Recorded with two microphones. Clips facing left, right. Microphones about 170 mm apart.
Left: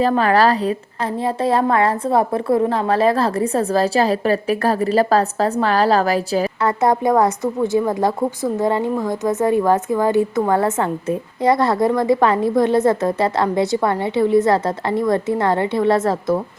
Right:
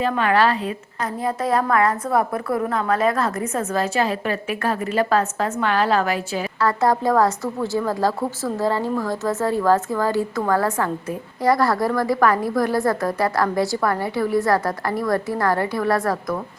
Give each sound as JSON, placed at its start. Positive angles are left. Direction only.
{"t": 0.0, "sound": "a woman's voice", "side_deg": 35}
{"t": 6.6, "sound": "a woman's voice", "side_deg": 20}